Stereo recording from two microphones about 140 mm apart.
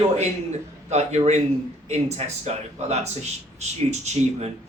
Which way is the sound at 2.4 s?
50° right (ahead or behind).